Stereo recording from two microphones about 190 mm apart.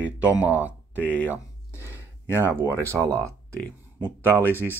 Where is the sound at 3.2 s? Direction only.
15° right (ahead or behind).